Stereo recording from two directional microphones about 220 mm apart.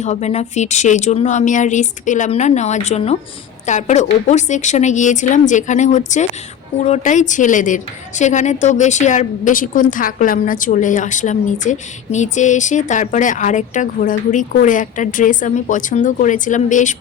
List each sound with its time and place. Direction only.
0.0 s a woman's voice: 30° left (ahead or behind)